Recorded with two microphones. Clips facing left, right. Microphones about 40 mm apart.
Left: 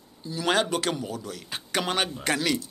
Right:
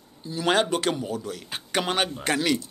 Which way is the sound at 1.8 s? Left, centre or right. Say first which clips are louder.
Right 2 dB; centre.